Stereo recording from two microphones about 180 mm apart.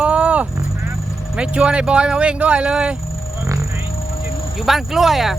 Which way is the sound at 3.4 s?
15° right (ahead or behind).